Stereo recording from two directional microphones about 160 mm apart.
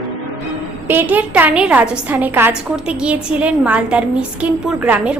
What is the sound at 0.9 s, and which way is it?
A woman's voice, 10° right (ahead or behind).